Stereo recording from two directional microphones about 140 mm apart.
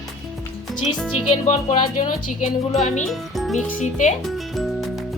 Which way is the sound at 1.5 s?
60° left (ahead or behind).